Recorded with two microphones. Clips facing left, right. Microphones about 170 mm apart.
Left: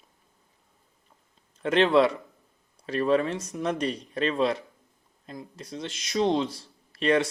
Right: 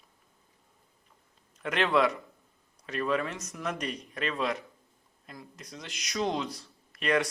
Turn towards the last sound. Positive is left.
turn(degrees=30)  # may be behind; listen again after turning